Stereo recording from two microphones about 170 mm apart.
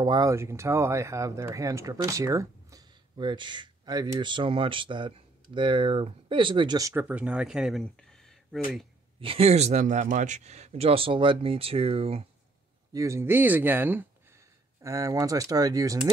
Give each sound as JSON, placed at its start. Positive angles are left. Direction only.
{"t": 0.0, "sound": "speech", "side_deg": -25}
{"t": 9.2, "sound": "speech", "side_deg": -35}
{"t": 12.9, "sound": "speech", "side_deg": -15}